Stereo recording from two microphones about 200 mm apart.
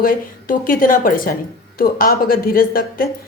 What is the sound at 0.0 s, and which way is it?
A woman's voice, 45° left (ahead or behind).